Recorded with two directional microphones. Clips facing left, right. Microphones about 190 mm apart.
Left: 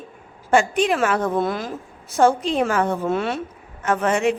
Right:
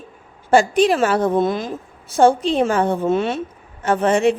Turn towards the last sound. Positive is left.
turn(degrees=-30)  # may be behind; listen again after turning